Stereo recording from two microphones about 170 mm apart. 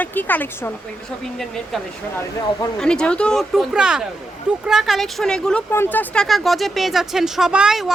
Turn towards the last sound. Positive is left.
turn(degrees=-5)  # may be behind; listen again after turning